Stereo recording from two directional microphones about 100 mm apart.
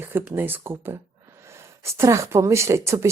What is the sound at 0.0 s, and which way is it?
Speech, 20° right (ahead or behind).